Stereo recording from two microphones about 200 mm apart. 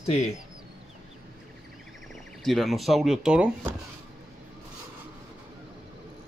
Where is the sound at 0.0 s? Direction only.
30° left (ahead or behind).